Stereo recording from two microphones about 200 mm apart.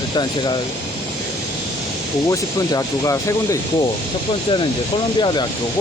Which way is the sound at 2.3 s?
15° left (ahead or behind).